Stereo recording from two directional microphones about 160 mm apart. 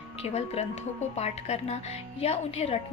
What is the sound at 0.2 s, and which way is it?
A woman's voice, 40° left (ahead or behind).